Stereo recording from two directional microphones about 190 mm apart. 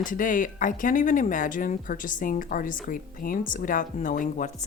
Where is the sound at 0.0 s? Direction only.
45° left (ahead or behind).